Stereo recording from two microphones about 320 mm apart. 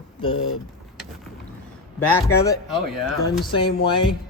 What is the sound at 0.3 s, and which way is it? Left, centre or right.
Speech, left.